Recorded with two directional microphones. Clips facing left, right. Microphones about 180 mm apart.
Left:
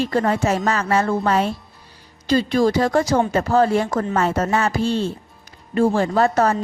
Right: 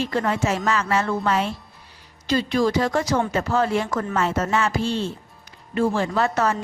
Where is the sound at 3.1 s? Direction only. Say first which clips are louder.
Left 4 dB; 25° left (ahead or behind).